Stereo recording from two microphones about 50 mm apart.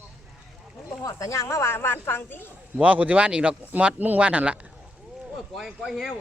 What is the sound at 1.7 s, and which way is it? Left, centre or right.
Speech, left.